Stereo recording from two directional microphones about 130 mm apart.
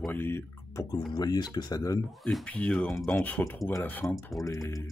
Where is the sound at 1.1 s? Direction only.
30° left (ahead or behind).